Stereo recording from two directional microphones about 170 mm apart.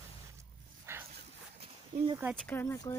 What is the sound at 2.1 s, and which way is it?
Speech, 10° right (ahead or behind).